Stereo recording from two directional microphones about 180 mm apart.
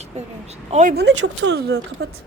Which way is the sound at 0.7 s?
45° right (ahead or behind).